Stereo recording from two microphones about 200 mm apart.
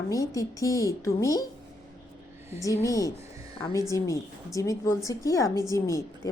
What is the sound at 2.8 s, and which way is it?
A woman's voice, 15° left (ahead or behind).